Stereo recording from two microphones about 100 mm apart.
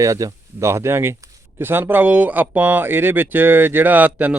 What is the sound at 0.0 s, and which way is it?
A man's voice, 35° right (ahead or behind).